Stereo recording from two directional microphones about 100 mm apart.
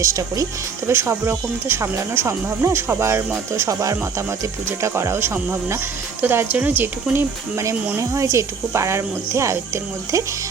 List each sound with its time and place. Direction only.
0.0 s speech: 35° right (ahead or behind)